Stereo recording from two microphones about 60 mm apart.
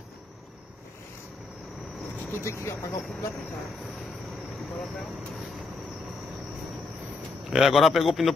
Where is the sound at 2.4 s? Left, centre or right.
Left.